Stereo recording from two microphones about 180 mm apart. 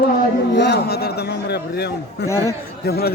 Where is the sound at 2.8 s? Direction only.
65° left (ahead or behind).